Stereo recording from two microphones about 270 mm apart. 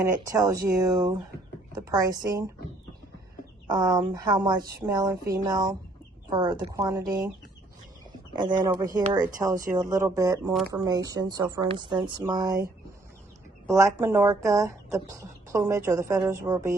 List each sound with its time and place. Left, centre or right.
0.3 s speech: centre
3.7 s speech: centre
8.4 s speech: centre
13.7 s speech: centre